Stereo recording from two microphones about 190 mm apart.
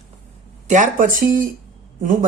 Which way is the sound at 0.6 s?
45° right (ahead or behind).